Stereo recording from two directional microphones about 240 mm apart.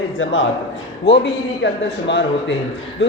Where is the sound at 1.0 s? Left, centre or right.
Left.